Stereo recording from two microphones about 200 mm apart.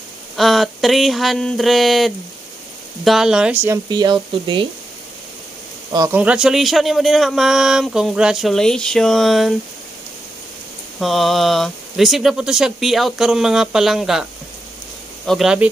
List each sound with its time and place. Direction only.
0.4 s speech: centre (ahead or behind); by 4.6 s 25° right (ahead or behind)
5.9 s speech: 20° right (ahead or behind)
6.1 s speech: 5° right (ahead or behind)
11.0 s speech: centre (ahead or behind)
15.2 s speech: centre (ahead or behind)